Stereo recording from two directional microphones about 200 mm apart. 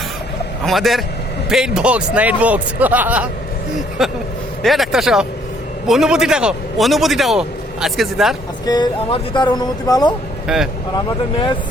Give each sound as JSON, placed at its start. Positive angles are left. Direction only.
{"t": 0.6, "sound": "a man's voice", "side_deg": 0}
{"t": 8.6, "sound": "speech", "side_deg": 20}
{"t": 10.4, "sound": "speech", "side_deg": 0}